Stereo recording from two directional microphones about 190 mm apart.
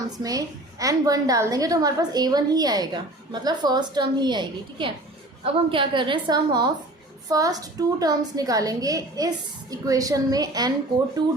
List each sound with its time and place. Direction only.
0.2 s a woman's voice: 20° right (ahead or behind)